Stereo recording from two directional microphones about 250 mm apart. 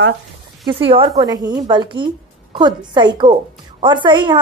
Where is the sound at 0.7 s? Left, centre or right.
Right.